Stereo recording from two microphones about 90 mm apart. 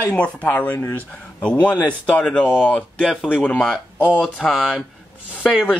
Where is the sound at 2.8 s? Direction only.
Centre (ahead or behind).